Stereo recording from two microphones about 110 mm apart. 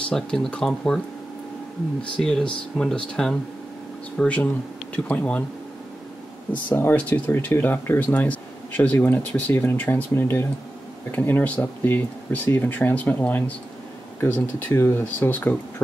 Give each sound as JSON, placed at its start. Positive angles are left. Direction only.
{"t": 0.1, "sound": "speech", "side_deg": 5}
{"t": 2.1, "sound": "speech", "side_deg": 5}
{"t": 6.5, "sound": "speech", "side_deg": 20}